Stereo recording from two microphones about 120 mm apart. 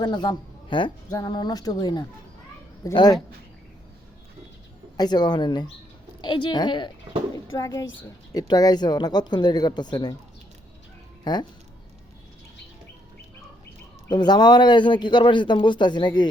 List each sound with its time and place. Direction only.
0.0 s speech: 35° left (ahead or behind)
4.9 s speech: 35° left (ahead or behind)
7.3 s a child's voice: 30° left (ahead or behind)
11.2 s speech: 35° left (ahead or behind)
14.1 s speech: 35° left (ahead or behind)